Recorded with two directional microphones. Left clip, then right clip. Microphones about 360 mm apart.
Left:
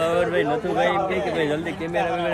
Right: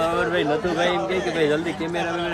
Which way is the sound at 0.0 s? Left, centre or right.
Centre.